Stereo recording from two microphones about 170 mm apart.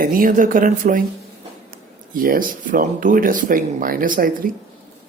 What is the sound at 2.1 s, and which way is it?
Speech, 55° right (ahead or behind).